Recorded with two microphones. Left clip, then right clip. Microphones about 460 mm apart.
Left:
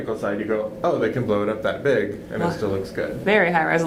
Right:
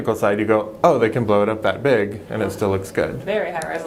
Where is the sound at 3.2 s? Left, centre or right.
Left.